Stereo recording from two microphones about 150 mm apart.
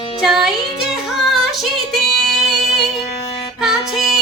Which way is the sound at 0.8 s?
Centre (ahead or behind).